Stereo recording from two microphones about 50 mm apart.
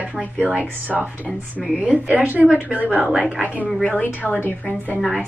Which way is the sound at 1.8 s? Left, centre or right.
Right.